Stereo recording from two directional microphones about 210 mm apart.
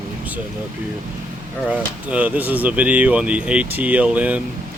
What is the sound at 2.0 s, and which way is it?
Speech, 5° right (ahead or behind).